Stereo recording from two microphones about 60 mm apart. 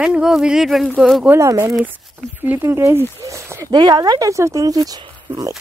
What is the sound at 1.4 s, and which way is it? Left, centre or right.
Speech, right.